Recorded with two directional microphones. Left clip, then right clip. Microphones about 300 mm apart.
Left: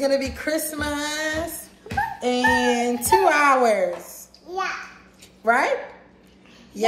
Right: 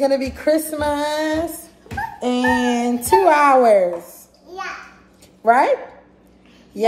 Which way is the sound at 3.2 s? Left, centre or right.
Centre.